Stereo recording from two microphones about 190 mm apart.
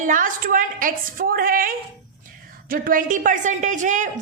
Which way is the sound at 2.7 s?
45° right (ahead or behind).